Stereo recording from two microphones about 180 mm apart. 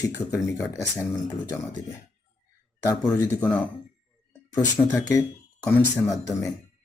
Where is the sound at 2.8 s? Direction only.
15° left (ahead or behind).